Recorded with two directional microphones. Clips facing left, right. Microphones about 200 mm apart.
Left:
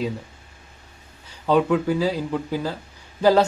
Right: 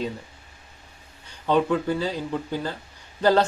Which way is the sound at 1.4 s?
5° left (ahead or behind).